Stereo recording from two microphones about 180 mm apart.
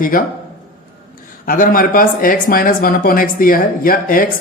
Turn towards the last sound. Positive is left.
turn(degrees=50)  # may be behind; listen again after turning